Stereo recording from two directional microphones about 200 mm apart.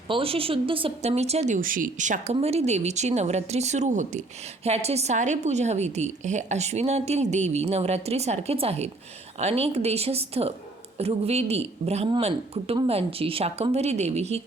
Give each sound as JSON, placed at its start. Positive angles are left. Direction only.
{"t": 0.1, "sound": "a woman's voice", "side_deg": -30}